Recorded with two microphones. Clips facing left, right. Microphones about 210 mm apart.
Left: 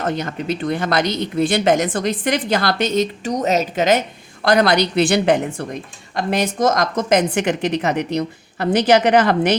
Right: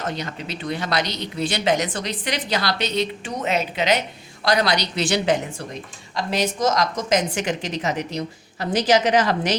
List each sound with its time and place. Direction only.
0.0 s a woman's voice: 50° left (ahead or behind)